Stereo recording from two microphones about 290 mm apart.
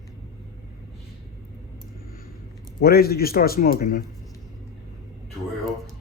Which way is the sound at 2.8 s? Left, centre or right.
Left.